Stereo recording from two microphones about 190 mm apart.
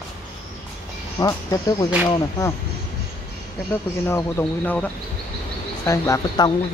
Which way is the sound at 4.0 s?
15° left (ahead or behind).